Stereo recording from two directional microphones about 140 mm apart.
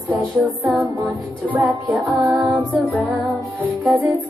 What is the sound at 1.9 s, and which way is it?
Music, 5° right (ahead or behind).